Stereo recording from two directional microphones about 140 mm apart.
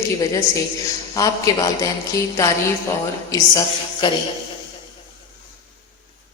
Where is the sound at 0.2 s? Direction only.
25° left (ahead or behind).